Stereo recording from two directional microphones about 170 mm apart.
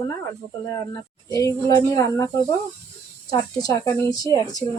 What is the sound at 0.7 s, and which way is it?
A woman's voice, 20° left (ahead or behind).